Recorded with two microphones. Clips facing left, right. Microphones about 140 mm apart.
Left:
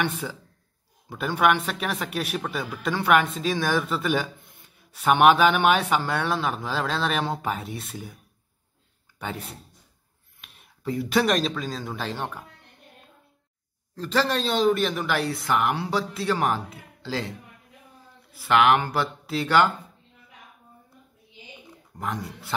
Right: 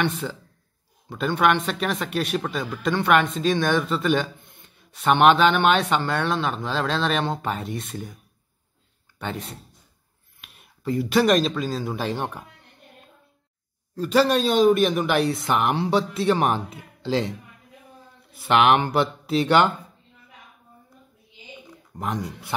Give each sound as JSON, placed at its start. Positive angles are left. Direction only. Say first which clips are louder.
{"t": 0.0, "sound": "a man's voice", "louder": "right 3 dB", "side_deg": 10}
{"t": 9.2, "sound": "speech", "louder": "right 2 dB", "side_deg": 5}
{"t": 13.9, "sound": "speech", "louder": "right 5 dB", "side_deg": -10}
{"t": 18.3, "sound": "speech", "louder": "right 1 dB", "side_deg": -20}
{"t": 21.9, "sound": "speech", "louder": "right 3 dB", "side_deg": -20}